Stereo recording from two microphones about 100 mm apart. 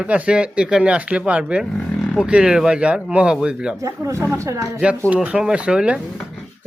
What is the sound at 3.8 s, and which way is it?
Speech, 30° right (ahead or behind).